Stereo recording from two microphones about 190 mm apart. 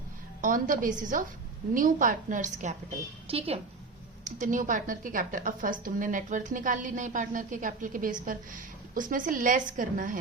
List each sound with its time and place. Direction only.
0.4 s a woman's voice: 45° right (ahead or behind)
4.2 s a woman's voice: 40° right (ahead or behind)